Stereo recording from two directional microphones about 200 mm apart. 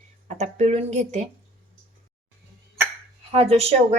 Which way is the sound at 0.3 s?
35° right (ahead or behind).